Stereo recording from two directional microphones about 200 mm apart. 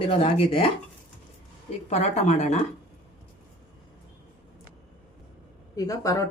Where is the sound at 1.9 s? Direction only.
35° left (ahead or behind).